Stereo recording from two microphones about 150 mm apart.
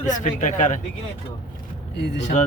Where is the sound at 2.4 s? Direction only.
55° left (ahead or behind).